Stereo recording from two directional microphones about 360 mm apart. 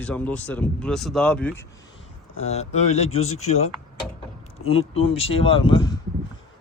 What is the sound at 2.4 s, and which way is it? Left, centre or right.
Speech, centre.